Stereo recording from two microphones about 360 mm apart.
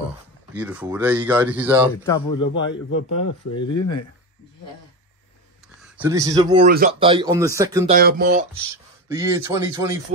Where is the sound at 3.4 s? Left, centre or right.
Left.